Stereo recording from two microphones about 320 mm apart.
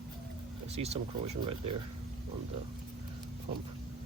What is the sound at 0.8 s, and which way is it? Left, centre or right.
Speech, centre.